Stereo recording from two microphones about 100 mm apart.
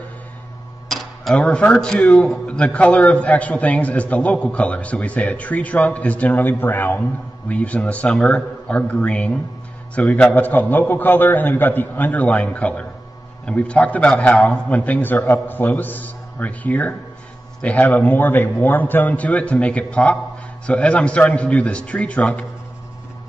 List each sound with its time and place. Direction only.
0.8 s cutlery: centre (ahead or behind)
1.3 s a man's voice: 10° left (ahead or behind)